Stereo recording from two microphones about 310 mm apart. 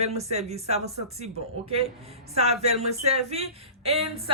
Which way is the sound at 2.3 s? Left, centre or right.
Centre.